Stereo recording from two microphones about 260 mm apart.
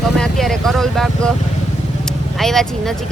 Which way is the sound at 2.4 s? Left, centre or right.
Centre.